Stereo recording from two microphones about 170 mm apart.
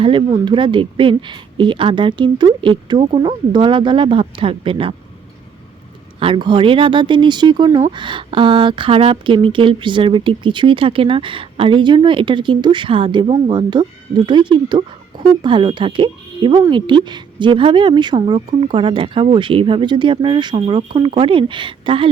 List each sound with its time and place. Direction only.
0.0 s speech: 30° right (ahead or behind)
6.1 s speech: 30° right (ahead or behind)